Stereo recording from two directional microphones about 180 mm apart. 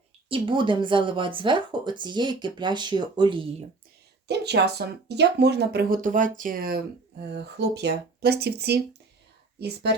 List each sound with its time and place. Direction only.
0.3 s speech: 30° right (ahead or behind)
4.3 s speech: 65° right (ahead or behind)
7.3 s speech: 65° right (ahead or behind)